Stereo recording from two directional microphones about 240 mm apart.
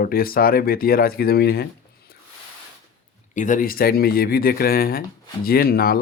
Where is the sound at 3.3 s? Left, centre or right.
Left.